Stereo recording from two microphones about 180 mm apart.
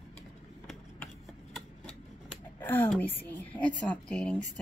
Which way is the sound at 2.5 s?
10° left (ahead or behind).